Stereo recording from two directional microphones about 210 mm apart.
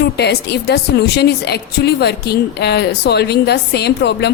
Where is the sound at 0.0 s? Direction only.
50° left (ahead or behind).